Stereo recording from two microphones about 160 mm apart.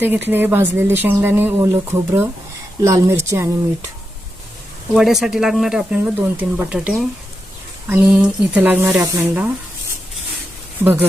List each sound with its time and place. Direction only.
0.0 s speech: 10° right (ahead or behind)
4.9 s speech: centre (ahead or behind)